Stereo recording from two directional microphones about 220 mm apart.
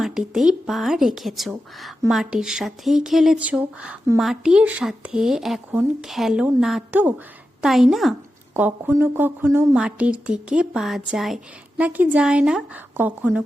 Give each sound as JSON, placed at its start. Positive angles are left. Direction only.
{"t": 0.0, "sound": "a woman's voice", "side_deg": 0}